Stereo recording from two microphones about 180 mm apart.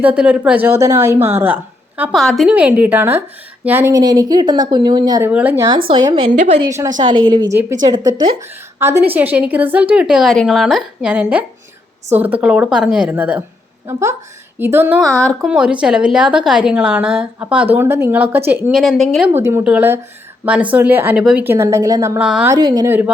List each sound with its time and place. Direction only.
0.0 s a woman's voice: 5° right (ahead or behind)
5.3 s a woman's voice: 10° right (ahead or behind)
5.9 s a woman's voice: 25° right (ahead or behind)
6.3 s a woman's voice: 40° right (ahead or behind)
6.7 s a woman's voice: 15° right (ahead or behind)
8.8 s a woman's voice: 10° right (ahead or behind)
15.0 s a woman's voice: 5° left (ahead or behind)
15.4 s a woman's voice: 5° right (ahead or behind)
19.4 s a woman's voice: 10° right (ahead or behind)
22.2 s a woman's voice: 5° right (ahead or behind)
22.5 s a woman's voice: 20° right (ahead or behind)